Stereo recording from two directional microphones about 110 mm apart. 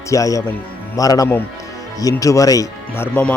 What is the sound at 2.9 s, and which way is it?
Speech, 20° left (ahead or behind).